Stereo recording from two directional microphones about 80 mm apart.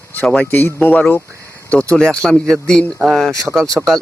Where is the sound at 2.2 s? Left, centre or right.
Centre.